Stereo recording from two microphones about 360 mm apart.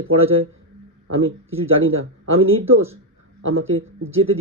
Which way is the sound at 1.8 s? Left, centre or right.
Right.